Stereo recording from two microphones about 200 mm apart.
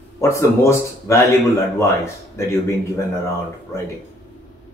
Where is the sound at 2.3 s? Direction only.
15° left (ahead or behind).